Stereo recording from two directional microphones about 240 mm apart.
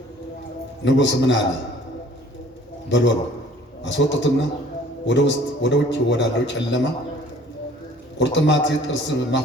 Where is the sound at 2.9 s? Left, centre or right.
Left.